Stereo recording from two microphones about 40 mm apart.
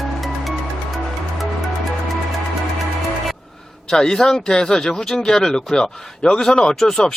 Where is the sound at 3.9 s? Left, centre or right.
Centre.